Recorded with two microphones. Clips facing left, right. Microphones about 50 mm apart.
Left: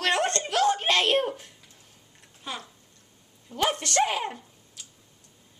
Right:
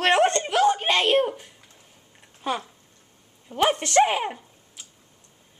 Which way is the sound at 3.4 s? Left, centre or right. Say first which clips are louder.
Right 4 dB; right.